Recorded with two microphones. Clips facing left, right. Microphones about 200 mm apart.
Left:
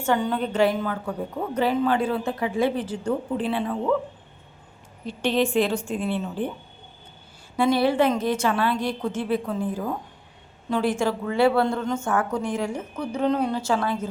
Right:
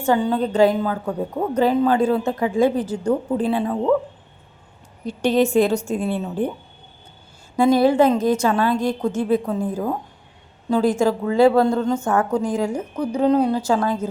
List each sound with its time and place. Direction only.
0.0 s a woman's voice: 35° right (ahead or behind)
5.0 s a woman's voice: 40° right (ahead or behind)
7.5 s a woman's voice: 45° right (ahead or behind)